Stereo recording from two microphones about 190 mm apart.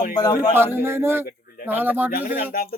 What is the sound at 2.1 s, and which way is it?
Speech, 50° left (ahead or behind).